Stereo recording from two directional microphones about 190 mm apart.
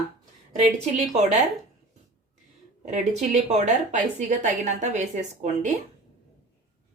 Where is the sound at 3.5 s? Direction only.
35° right (ahead or behind).